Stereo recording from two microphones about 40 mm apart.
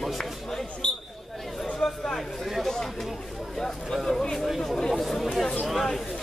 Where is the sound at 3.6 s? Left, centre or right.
Centre.